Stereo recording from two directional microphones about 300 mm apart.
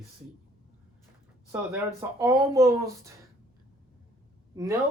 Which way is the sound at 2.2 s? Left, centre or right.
Centre.